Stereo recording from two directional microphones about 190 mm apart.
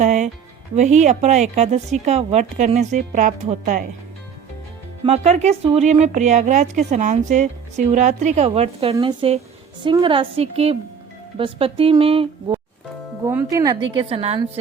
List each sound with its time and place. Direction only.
0.0 s speech: 40° right (ahead or behind)
5.0 s speech: 35° right (ahead or behind)
13.2 s speech: 15° right (ahead or behind)
13.9 s speech: 30° right (ahead or behind)